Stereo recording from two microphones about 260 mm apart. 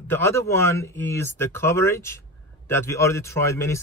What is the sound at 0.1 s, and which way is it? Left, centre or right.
Speech, centre.